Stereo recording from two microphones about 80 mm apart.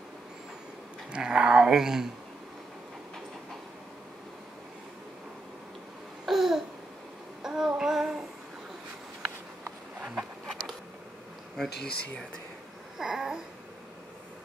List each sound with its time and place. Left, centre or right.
1.1 s speech: centre
6.2 s babbling: centre
7.4 s child singing: centre
9.9 s a sound: right
10.5 s a sound: centre
11.5 s speech: centre
12.9 s babbling: centre